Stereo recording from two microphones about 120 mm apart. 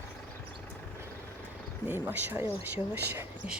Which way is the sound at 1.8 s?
15° right (ahead or behind).